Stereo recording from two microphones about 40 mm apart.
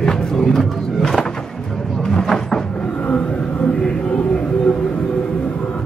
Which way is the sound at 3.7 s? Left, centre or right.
Centre.